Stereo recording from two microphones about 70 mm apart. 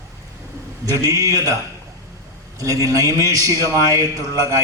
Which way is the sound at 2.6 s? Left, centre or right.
Right.